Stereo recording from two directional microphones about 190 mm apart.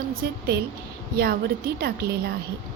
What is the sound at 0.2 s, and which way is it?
A woman's voice, 60° right (ahead or behind).